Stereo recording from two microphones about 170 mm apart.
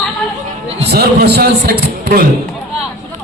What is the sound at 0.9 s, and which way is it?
A man's voice, 65° right (ahead or behind).